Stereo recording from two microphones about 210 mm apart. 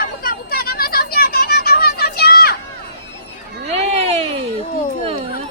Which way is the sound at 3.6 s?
30° right (ahead or behind).